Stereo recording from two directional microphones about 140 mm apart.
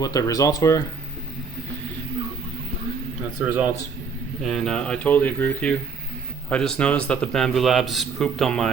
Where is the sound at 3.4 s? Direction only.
10° right (ahead or behind).